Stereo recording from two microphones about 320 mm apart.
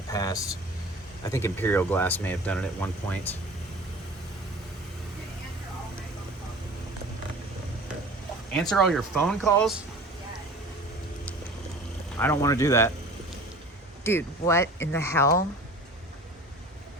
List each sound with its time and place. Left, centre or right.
0.1 s air conditioning: centre
1.2 s speech: centre
8.7 s speech: centre
12.2 s speech: centre
14.0 s speech: centre